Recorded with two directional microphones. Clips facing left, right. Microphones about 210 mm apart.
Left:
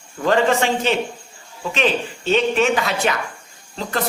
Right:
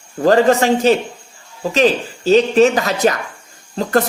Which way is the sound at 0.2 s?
40° right (ahead or behind).